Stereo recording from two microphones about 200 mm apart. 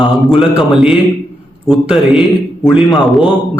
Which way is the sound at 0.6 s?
Centre (ahead or behind).